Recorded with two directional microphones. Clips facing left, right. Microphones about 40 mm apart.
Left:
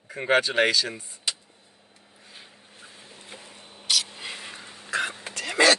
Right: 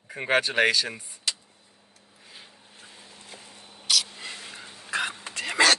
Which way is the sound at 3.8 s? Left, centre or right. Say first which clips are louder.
Even; centre.